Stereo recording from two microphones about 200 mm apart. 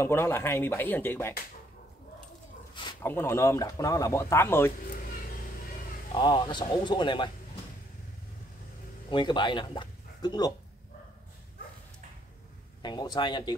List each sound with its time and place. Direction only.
0.0 s speech: 10° left (ahead or behind)
2.7 s a sound: 25° left (ahead or behind)
3.0 s speech: 10° left (ahead or behind)
6.1 s speech: 20° left (ahead or behind)
9.1 s speech: 25° left (ahead or behind)
12.8 s speech: 20° left (ahead or behind)